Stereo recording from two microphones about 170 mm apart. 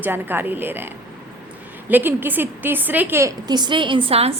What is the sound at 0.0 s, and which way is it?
Speech, 10° right (ahead or behind).